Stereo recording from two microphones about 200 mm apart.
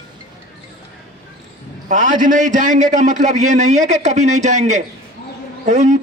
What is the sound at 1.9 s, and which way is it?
A man's voice, 40° right (ahead or behind).